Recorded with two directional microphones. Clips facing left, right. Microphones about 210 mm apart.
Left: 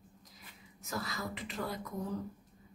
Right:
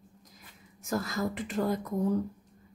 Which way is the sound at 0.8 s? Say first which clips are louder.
Right 8 dB; 45° right (ahead or behind).